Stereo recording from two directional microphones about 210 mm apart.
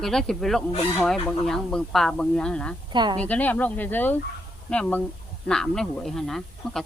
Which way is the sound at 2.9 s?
20° right (ahead or behind).